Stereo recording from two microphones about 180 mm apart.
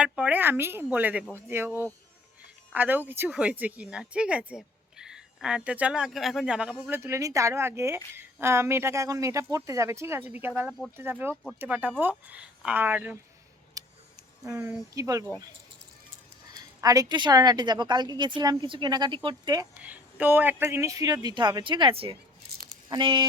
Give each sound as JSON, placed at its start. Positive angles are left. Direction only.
{"t": 0.0, "sound": "a woman's voice", "side_deg": -5}
{"t": 13.8, "sound": "a sound", "side_deg": -20}
{"t": 14.4, "sound": "a woman's voice", "side_deg": -15}
{"t": 16.6, "sound": "a woman's voice", "side_deg": -20}
{"t": 19.8, "sound": "a woman's voice", "side_deg": -10}